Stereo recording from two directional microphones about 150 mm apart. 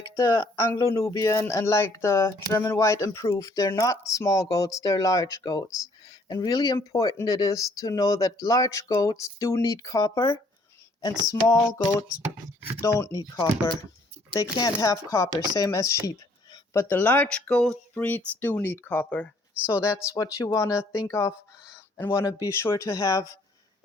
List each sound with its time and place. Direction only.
0.2 s speech: 20° left (ahead or behind)
14.8 s speech: 20° left (ahead or behind)